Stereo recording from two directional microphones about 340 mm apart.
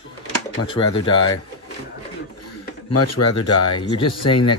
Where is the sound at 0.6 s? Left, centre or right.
Centre.